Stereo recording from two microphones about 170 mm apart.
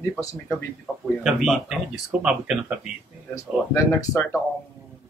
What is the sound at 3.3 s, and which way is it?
Speech, 20° left (ahead or behind).